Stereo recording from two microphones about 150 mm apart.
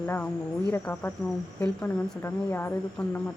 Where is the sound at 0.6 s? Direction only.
10° left (ahead or behind).